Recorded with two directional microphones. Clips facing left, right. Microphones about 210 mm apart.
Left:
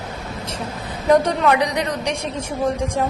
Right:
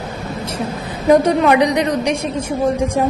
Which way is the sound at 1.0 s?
10° right (ahead or behind).